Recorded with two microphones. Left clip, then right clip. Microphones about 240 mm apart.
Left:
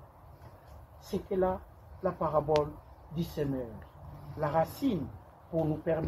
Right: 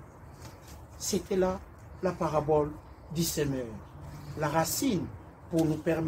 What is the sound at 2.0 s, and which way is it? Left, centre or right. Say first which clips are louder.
Speech: right 1 dB; centre.